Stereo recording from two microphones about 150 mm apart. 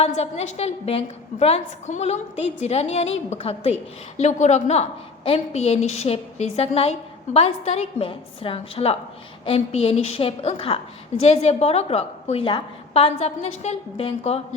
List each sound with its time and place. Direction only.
0.0 s a woman's voice: 45° left (ahead or behind)